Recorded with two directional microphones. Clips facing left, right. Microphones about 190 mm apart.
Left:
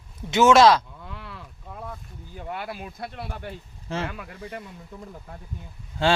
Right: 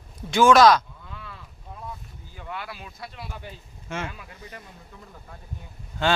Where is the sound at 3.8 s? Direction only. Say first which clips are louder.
Left 3 dB; 35° left (ahead or behind).